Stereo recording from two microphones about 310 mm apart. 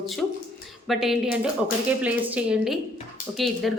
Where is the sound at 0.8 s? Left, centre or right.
Centre.